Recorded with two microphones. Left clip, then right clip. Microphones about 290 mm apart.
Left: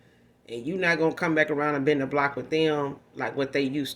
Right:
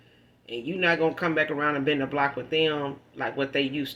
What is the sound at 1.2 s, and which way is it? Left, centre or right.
Speech, left.